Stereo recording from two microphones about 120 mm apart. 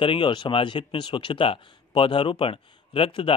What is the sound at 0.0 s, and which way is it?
Speech, 45° left (ahead or behind).